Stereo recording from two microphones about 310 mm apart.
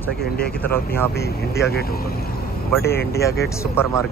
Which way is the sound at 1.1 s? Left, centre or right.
Left.